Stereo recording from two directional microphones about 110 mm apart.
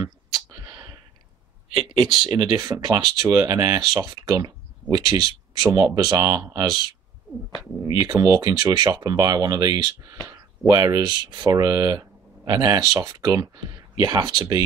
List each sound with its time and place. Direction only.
0.0 s clicking: 30° right (ahead or behind)
0.7 s a sound: 45° right (ahead or behind)
1.7 s speech: 50° right (ahead or behind)
7.8 s speech: 35° right (ahead or behind)